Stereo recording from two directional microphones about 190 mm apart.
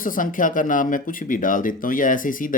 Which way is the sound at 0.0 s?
45° left (ahead or behind).